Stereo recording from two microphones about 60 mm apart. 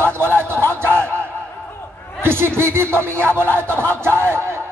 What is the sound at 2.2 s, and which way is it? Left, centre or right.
A man's voice, right.